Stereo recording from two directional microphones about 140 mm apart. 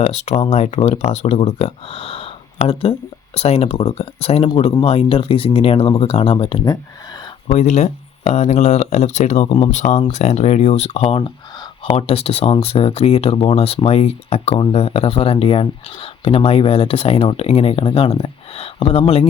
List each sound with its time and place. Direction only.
0.0 s speech: 50° left (ahead or behind)
7.4 s speech: 60° left (ahead or behind)